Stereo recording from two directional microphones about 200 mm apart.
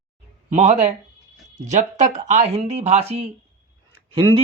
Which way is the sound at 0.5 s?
35° right (ahead or behind).